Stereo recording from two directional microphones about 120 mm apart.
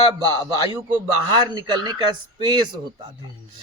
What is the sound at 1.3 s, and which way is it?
Speech, 40° right (ahead or behind).